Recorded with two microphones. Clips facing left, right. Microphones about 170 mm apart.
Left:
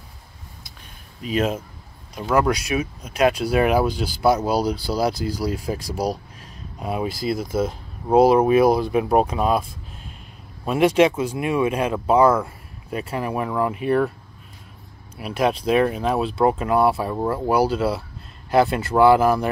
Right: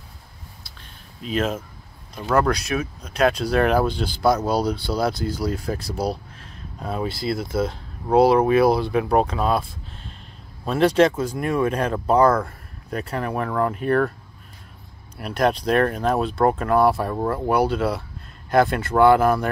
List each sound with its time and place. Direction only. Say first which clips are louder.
1.2 s speech: left 2 dB; 5° left (ahead or behind)
15.1 s speech: even; 5° left (ahead or behind)